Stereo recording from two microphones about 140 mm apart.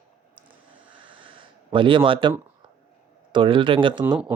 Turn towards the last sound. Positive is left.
turn(degrees=-35)  # may be behind; listen again after turning